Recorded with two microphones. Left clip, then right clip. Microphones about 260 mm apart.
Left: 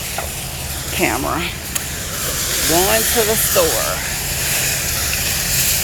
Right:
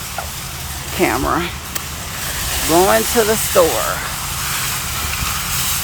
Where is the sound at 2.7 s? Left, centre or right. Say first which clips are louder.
Right 4 dB; right.